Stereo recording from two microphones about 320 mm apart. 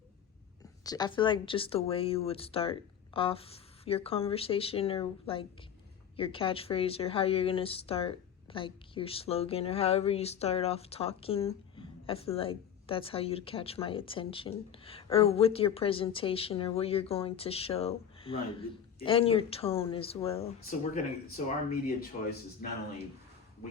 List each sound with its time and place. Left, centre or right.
0.9 s a woman's voice: centre